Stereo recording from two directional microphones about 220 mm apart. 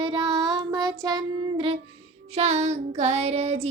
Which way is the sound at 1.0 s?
15° right (ahead or behind).